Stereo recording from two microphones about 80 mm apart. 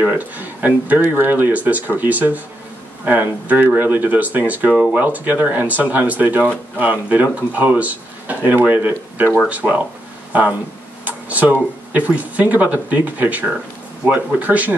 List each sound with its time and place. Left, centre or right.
0.0 s speech: right
11.1 s speech: right